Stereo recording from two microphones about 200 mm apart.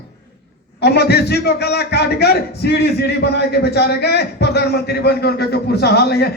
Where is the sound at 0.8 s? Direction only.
55° left (ahead or behind).